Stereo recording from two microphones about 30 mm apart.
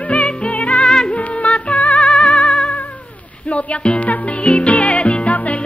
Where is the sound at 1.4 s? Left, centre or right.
Left.